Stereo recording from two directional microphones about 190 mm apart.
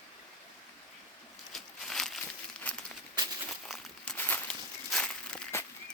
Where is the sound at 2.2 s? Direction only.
5° left (ahead or behind).